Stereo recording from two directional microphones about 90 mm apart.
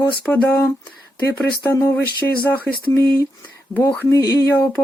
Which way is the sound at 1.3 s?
30° left (ahead or behind).